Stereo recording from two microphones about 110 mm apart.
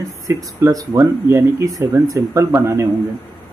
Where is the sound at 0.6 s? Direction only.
30° right (ahead or behind).